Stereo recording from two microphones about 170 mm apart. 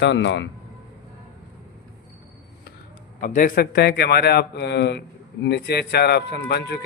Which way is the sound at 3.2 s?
55° left (ahead or behind).